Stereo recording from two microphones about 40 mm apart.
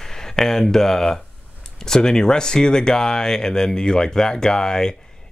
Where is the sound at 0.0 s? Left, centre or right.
Centre.